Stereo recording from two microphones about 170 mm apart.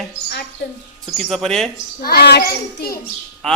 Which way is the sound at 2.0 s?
65° left (ahead or behind).